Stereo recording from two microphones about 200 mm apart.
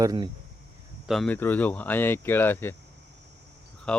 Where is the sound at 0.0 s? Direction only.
20° right (ahead or behind).